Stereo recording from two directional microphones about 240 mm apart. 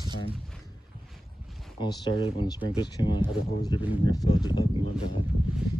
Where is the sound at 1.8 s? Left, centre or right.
Centre.